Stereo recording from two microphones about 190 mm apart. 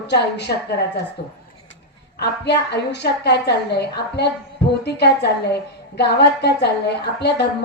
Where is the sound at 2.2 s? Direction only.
60° left (ahead or behind).